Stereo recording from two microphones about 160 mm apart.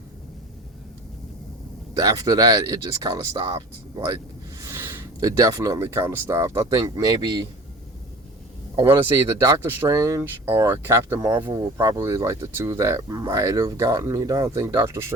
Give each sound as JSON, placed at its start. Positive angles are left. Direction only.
{"t": 2.0, "sound": "speech", "side_deg": -20}
{"t": 8.7, "sound": "speech", "side_deg": -25}